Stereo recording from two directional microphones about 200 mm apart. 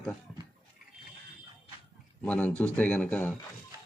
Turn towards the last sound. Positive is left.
turn(degrees=5)  # may be behind; listen again after turning